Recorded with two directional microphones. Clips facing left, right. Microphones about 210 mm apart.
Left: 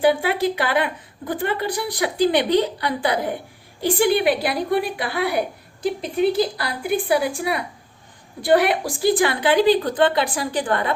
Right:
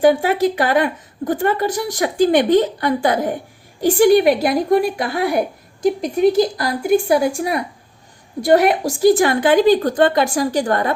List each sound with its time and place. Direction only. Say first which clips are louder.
0.0 s speech: right 4 dB; 45° right (ahead or behind)